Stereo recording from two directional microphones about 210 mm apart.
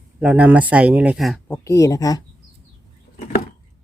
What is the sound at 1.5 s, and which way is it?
Speech, 15° left (ahead or behind).